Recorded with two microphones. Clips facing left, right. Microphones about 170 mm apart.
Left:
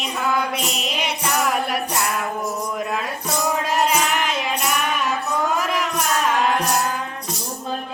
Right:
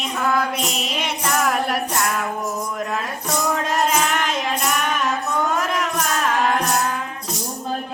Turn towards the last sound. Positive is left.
turn(degrees=0)  # may be behind; listen again after turning